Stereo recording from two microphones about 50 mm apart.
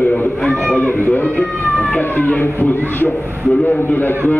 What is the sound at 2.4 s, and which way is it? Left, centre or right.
A man's voice, left.